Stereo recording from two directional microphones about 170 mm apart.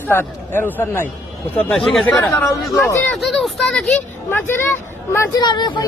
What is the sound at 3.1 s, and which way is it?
A man's voice, centre (ahead or behind).